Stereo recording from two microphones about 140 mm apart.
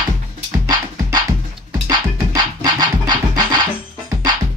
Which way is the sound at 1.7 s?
30° right (ahead or behind).